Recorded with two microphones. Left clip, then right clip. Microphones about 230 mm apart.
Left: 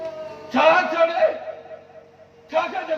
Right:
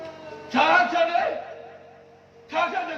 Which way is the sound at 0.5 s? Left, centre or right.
Right.